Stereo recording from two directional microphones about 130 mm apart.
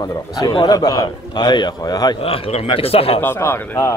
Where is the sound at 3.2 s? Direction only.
20° left (ahead or behind).